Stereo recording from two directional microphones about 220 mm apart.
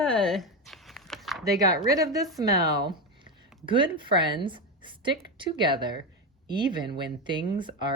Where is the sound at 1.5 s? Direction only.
15° right (ahead or behind).